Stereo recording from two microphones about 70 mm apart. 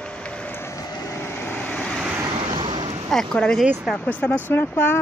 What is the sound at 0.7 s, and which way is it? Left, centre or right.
Vehicle, left.